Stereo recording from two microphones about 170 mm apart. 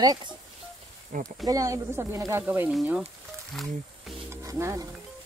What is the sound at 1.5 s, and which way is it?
Speech, 20° right (ahead or behind).